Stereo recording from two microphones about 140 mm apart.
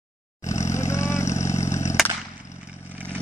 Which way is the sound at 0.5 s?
20° left (ahead or behind).